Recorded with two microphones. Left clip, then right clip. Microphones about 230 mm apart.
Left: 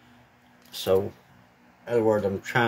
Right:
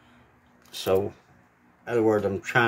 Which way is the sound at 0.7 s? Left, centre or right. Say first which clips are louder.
Left 1 dB; centre.